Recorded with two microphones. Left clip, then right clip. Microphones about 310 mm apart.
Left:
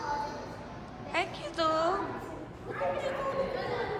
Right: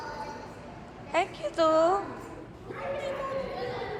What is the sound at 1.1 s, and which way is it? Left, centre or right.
Speech, centre.